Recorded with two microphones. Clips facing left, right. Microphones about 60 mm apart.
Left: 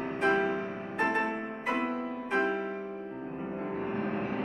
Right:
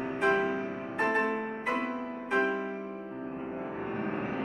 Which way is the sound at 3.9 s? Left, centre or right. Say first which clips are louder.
Right 1 dB; centre.